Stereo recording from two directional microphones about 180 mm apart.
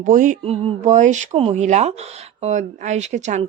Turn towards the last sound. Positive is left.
turn(degrees=-40)  # may be behind; listen again after turning